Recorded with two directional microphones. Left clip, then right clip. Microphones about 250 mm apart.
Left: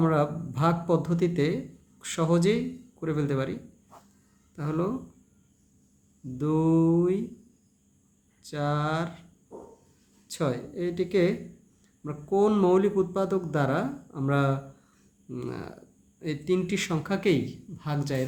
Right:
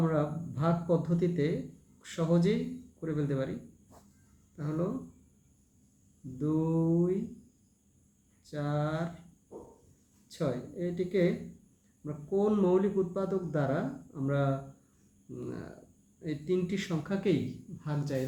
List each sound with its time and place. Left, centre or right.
0.0 s a man's voice: left
4.5 s speech: left
6.4 s a man's voice: left
8.4 s a man's voice: left
10.2 s a man's voice: left